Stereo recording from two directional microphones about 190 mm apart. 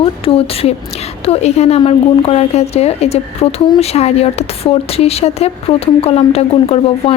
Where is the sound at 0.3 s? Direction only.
30° left (ahead or behind).